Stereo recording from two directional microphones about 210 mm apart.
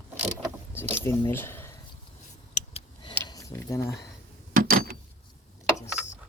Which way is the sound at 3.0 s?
20° left (ahead or behind).